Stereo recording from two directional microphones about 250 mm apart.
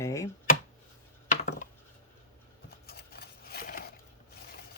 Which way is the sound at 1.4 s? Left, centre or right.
Left.